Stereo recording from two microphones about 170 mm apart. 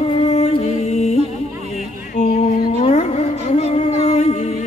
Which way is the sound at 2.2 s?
40° left (ahead or behind).